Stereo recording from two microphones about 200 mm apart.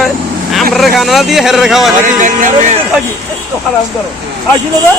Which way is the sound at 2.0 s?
40° right (ahead or behind).